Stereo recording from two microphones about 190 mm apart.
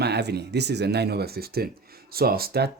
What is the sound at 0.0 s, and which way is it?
Speech, 60° right (ahead or behind).